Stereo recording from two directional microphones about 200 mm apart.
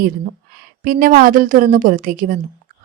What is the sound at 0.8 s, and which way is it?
A woman's voice, 45° right (ahead or behind).